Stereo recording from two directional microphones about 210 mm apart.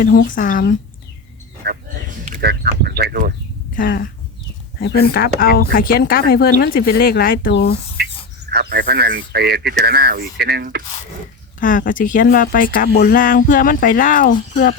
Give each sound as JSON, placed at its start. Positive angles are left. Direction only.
{"t": 0.3, "sound": "speech", "side_deg": 40}
{"t": 1.6, "sound": "a sound", "side_deg": -40}
{"t": 3.8, "sound": "speech", "side_deg": 45}
{"t": 8.5, "sound": "speech", "side_deg": -50}
{"t": 11.6, "sound": "speech", "side_deg": 40}